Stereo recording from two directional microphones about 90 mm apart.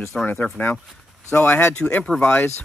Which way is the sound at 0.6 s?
15° left (ahead or behind).